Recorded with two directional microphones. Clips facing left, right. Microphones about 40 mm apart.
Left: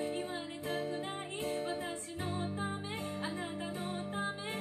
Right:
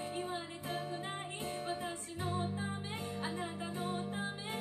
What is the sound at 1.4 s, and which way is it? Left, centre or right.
Music, left.